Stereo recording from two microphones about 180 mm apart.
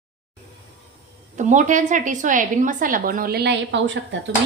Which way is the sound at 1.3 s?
45° right (ahead or behind).